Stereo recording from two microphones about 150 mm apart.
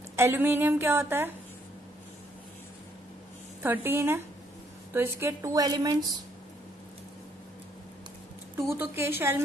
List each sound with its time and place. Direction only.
0.1 s a woman's voice: 15° right (ahead or behind)
3.6 s a woman's voice: 15° right (ahead or behind)
8.5 s a woman's voice: 15° right (ahead or behind)